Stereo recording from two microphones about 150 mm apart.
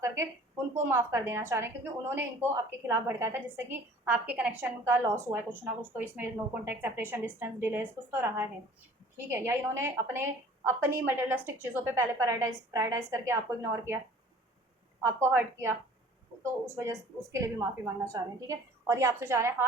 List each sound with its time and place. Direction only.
0.0 s a woman's voice: 20° right (ahead or behind)
15.0 s a woman's voice: 15° right (ahead or behind)